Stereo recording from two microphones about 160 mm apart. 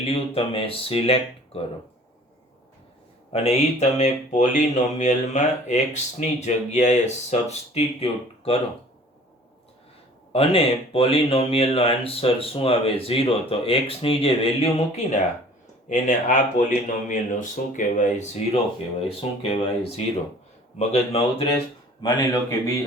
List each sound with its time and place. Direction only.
0.0 s speech: 35° left (ahead or behind)
3.3 s speech: 40° left (ahead or behind)
10.3 s speech: 35° left (ahead or behind)
19.0 s speech: 35° left (ahead or behind)
20.7 s speech: 40° left (ahead or behind)
22.0 s speech: 20° left (ahead or behind)